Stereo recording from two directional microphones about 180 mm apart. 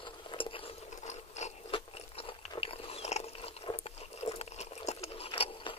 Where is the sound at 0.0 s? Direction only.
30° left (ahead or behind).